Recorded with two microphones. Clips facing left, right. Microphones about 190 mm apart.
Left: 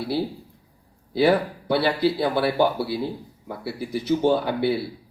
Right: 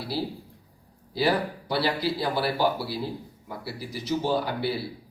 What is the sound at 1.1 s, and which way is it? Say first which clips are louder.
Speech: left 6 dB; 60° left (ahead or behind).